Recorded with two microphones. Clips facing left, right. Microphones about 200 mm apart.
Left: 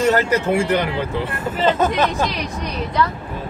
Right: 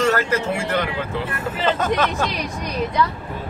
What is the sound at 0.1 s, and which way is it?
Speech, 20° left (ahead or behind).